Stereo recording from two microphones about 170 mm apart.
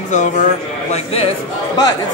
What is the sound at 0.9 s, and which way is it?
Speech, 35° left (ahead or behind).